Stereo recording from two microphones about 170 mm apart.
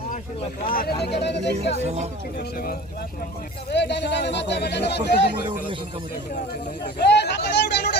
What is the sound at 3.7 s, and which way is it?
Speech, 85° left.